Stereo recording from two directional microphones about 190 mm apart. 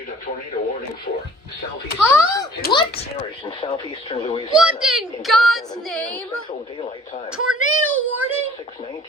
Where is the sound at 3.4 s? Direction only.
30° left (ahead or behind).